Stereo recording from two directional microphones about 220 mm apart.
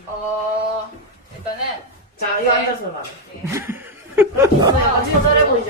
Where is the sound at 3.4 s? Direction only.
10° right (ahead or behind).